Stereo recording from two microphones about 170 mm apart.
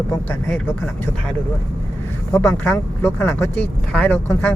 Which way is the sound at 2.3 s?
10° left (ahead or behind).